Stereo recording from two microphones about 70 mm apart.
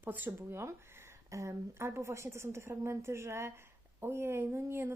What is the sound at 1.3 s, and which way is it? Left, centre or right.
Speech, right.